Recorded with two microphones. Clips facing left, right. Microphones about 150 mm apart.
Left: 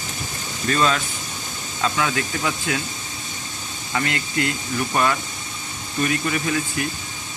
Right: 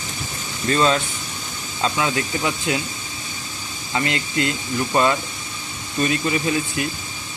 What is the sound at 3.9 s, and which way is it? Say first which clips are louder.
Speech: right 2 dB; 20° right (ahead or behind).